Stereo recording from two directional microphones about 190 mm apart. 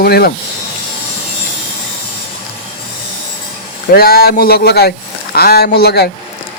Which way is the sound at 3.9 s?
55° left (ahead or behind).